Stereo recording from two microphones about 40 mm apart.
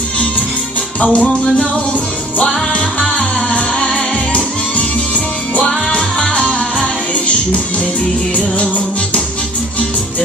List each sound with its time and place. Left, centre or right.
0.9 s music: left
2.7 s music: left
4.3 s music: left
6.0 s music: centre